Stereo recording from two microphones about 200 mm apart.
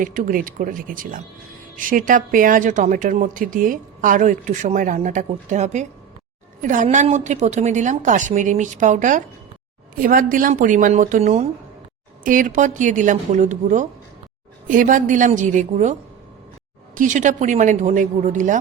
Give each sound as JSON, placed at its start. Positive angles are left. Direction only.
{"t": 0.0, "sound": "a woman's voice", "side_deg": -45}